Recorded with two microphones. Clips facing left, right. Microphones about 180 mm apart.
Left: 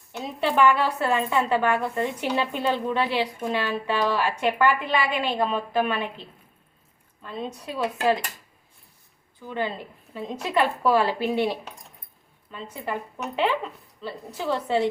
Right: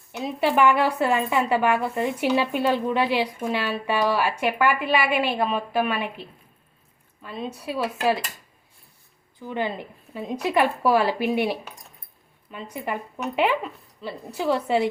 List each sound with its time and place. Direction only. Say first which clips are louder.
0.2 s a woman's voice: right 1 dB; 10° right (ahead or behind)
9.4 s a woman's voice: right 1 dB; 15° right (ahead or behind)